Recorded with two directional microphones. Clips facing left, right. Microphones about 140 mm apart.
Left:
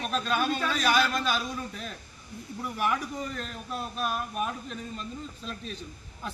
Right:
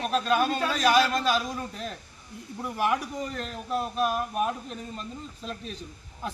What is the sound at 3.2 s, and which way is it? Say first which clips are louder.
A man's voice: right 2 dB; 40° right (ahead or behind).